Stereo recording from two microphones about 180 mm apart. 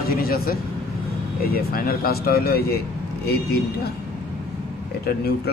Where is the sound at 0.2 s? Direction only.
55° left (ahead or behind).